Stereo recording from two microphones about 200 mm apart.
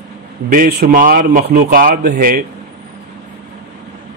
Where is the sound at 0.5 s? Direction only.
50° right (ahead or behind).